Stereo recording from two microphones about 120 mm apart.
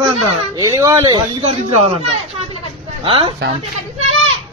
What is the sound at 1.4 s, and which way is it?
Speech, 60° right (ahead or behind).